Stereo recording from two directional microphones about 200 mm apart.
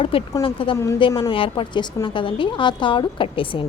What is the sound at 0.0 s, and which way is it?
A woman's voice, 25° left (ahead or behind).